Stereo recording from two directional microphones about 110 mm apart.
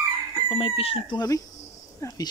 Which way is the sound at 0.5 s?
50° left (ahead or behind).